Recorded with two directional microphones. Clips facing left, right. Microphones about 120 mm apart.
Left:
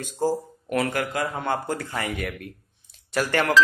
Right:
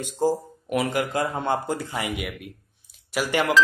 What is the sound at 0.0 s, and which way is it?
Speech, 15° right (ahead or behind).